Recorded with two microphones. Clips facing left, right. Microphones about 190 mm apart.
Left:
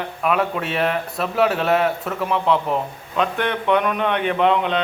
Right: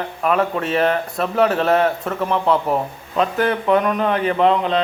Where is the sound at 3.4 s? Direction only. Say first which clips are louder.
Right 3 dB; centre (ahead or behind).